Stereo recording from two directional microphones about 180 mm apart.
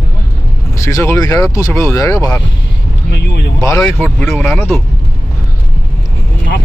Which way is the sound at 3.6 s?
15° left (ahead or behind).